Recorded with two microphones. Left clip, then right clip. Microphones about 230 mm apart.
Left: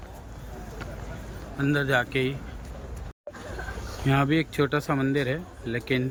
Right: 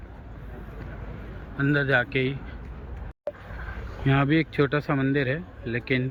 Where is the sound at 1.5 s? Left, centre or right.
Centre.